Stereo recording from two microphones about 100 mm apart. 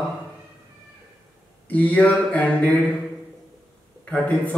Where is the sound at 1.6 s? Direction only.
15° left (ahead or behind).